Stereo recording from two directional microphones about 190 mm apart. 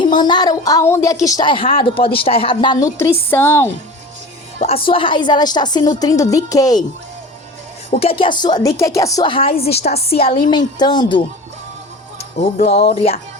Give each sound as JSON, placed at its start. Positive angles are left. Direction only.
{"t": 0.0, "sound": "speech", "side_deg": 25}
{"t": 4.6, "sound": "speech", "side_deg": 30}
{"t": 7.9, "sound": "speech", "side_deg": 30}
{"t": 12.6, "sound": "speech", "side_deg": 35}